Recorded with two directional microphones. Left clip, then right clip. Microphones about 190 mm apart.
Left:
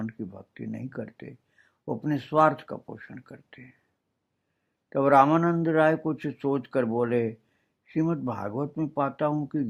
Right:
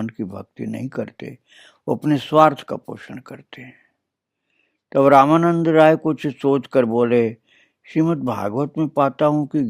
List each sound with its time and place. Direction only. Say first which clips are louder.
0.0 s speech: right 9 dB; 40° right (ahead or behind)
4.9 s speech: right 7 dB; 40° right (ahead or behind)